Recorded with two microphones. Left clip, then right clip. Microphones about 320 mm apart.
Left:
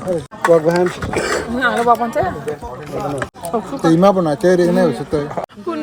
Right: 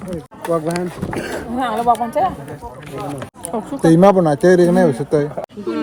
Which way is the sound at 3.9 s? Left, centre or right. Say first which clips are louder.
Right 1 dB; right.